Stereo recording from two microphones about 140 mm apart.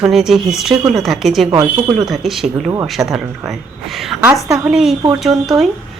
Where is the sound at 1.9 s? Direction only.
Centre (ahead or behind).